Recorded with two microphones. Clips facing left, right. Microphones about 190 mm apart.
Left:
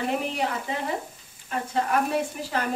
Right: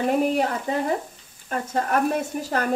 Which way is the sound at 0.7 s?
40° right (ahead or behind).